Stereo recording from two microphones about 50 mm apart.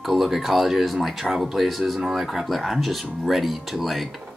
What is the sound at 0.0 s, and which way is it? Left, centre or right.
Speech, centre.